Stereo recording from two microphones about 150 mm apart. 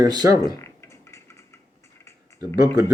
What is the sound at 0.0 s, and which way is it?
Speech, 25° right (ahead or behind).